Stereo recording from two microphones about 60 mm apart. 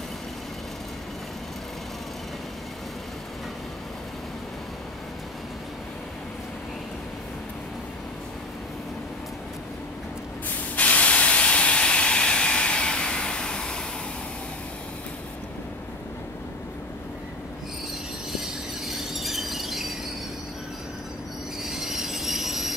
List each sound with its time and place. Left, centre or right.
10.8 s steam: left
18.3 s a sound: centre
21.6 s train wheels squealing: centre